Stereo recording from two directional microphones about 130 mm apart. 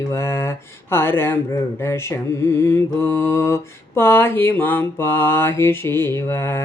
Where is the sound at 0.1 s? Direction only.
20° left (ahead or behind).